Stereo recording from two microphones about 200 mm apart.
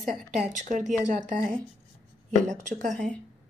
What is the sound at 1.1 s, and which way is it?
Speech, 40° right (ahead or behind).